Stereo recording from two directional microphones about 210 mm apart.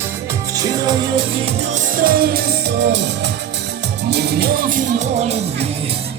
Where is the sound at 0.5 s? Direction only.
20° right (ahead or behind).